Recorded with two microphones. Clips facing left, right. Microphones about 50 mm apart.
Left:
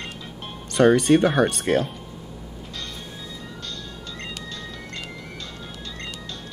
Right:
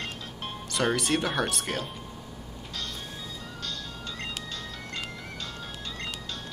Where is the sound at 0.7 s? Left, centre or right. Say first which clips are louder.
Left 11 dB; left.